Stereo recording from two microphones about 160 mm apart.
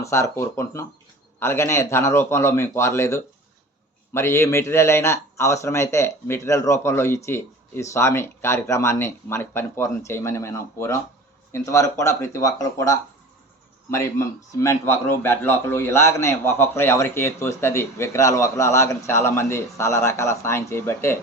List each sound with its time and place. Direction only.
0.0 s a man's voice: 15° left (ahead or behind)